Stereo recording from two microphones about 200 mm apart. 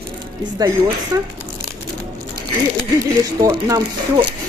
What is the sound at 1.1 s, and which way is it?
Speech, 20° right (ahead or behind).